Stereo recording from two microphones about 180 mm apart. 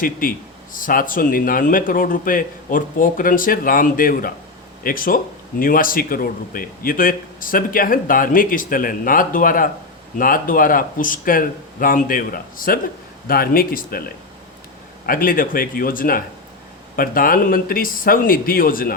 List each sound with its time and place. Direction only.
0.0 s speech: 50° left (ahead or behind)
15.0 s speech: 50° left (ahead or behind)